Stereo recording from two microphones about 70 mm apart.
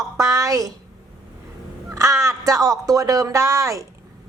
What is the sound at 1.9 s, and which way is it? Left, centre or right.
A woman's voice, right.